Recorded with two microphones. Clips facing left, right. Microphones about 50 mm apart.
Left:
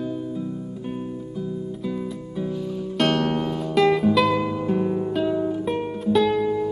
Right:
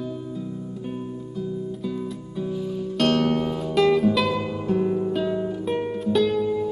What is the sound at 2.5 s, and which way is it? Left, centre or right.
Music, centre.